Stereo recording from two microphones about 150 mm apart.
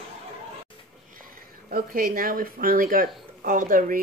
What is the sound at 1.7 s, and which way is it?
Speech, 75° right (ahead or behind).